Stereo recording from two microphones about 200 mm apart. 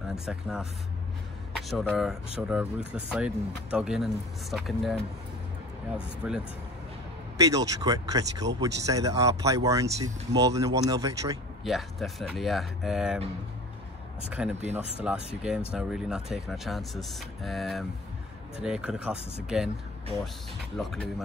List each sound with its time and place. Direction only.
0.1 s speech: 5° right (ahead or behind)
6.2 s speech: 5° right (ahead or behind)
7.3 s speech: 15° right (ahead or behind)
11.6 s speech: centre (ahead or behind)
14.4 s speech: 5° right (ahead or behind)
20.7 s speech: centre (ahead or behind)